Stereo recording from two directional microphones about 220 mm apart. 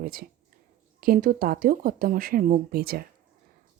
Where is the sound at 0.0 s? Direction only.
45° right (ahead or behind).